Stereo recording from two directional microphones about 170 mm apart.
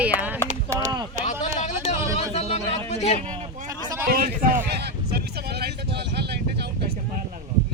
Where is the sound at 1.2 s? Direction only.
45° left (ahead or behind).